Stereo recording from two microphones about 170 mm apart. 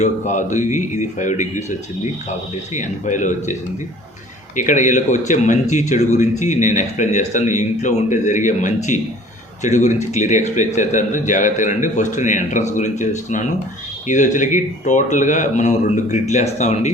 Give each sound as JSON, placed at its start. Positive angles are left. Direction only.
{"t": 0.0, "sound": "a man's voice", "side_deg": 45}
{"t": 2.7, "sound": "a man's voice", "side_deg": 45}